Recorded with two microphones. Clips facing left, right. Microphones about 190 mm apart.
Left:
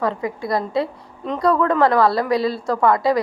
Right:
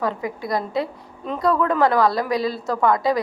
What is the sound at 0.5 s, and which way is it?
A woman's voice, centre (ahead or behind).